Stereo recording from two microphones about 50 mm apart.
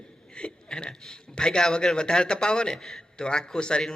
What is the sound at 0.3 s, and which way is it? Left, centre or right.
A man's voice, centre.